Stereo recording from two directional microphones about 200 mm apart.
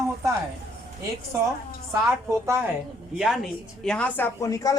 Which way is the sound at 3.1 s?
Centre (ahead or behind).